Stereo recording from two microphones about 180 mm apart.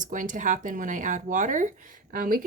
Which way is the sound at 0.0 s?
45° right (ahead or behind).